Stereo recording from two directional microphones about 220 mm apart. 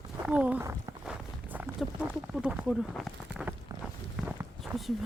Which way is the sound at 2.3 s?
5° right (ahead or behind).